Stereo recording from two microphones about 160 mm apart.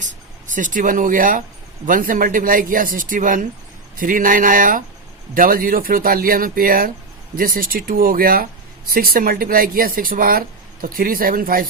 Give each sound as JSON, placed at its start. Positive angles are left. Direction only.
{"t": 0.5, "sound": "speech", "side_deg": -55}